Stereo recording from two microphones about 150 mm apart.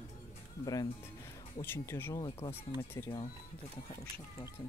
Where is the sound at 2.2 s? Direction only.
35° left (ahead or behind).